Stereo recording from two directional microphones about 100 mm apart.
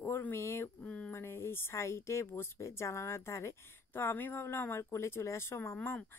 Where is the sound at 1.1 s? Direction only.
25° left (ahead or behind).